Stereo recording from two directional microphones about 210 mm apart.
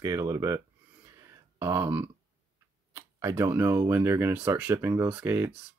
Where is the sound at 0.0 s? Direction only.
15° right (ahead or behind).